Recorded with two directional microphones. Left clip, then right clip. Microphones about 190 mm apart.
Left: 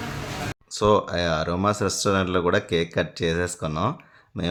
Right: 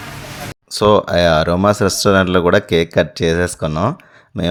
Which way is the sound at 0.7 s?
40° right (ahead or behind).